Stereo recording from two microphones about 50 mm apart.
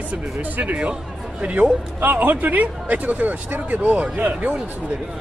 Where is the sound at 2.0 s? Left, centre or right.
Right.